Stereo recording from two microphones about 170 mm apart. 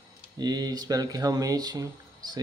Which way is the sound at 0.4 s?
25° right (ahead or behind).